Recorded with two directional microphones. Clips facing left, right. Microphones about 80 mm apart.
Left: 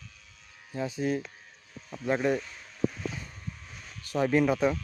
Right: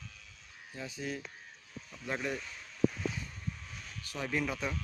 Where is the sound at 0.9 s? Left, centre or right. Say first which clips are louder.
Left 9 dB; left.